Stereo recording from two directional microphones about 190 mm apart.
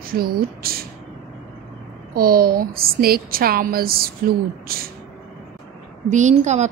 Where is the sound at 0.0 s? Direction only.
50° right (ahead or behind).